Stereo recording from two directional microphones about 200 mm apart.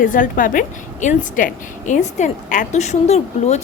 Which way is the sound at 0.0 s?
40° left (ahead or behind).